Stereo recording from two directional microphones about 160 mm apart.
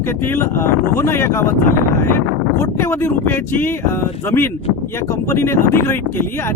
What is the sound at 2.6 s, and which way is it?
Speech, 15° left (ahead or behind).